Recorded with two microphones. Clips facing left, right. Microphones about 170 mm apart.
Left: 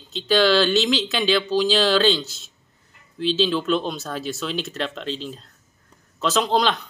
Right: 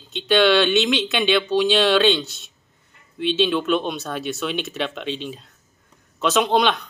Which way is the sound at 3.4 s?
Centre (ahead or behind).